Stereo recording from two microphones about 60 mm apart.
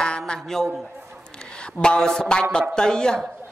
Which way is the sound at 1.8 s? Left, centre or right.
Centre.